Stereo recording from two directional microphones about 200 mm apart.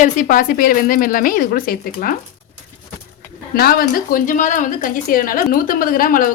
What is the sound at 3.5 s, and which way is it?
A woman's voice, 50° left (ahead or behind).